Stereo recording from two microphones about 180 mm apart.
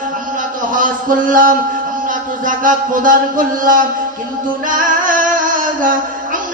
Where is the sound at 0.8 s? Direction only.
50° right (ahead or behind).